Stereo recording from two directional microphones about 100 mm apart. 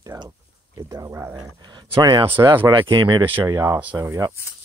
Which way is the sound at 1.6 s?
45° right (ahead or behind).